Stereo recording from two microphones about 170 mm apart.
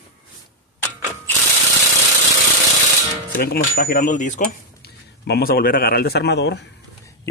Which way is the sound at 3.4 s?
60° left (ahead or behind).